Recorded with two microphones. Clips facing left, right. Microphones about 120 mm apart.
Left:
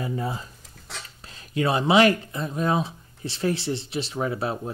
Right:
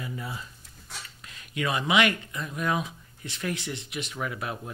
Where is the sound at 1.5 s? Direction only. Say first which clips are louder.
Left 6 dB; 35° left (ahead or behind).